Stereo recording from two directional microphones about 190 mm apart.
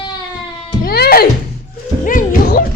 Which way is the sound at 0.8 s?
55° left (ahead or behind).